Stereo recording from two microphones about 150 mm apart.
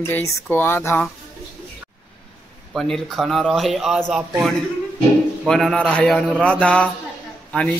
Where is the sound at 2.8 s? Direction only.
Centre (ahead or behind).